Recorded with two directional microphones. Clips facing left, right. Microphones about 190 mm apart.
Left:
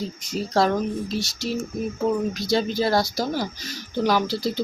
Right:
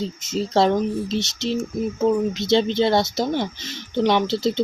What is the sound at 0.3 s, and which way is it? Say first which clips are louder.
Speech: right 3 dB; 25° right (ahead or behind).